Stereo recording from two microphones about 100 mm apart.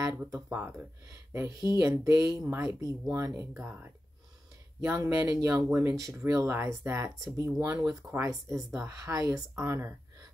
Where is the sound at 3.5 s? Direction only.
15° right (ahead or behind).